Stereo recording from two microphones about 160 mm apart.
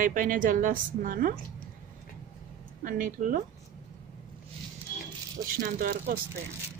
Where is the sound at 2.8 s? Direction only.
60° right (ahead or behind).